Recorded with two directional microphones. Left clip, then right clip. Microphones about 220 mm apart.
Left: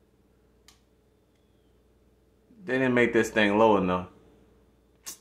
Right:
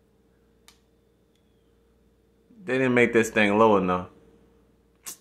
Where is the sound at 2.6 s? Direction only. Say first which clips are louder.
Right 2 dB; 15° right (ahead or behind).